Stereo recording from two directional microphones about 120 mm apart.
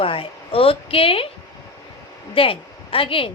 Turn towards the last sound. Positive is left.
turn(degrees=50)  # may be behind; listen again after turning